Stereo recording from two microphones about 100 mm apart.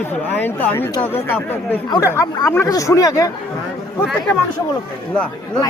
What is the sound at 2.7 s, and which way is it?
Speech, 35° left (ahead or behind).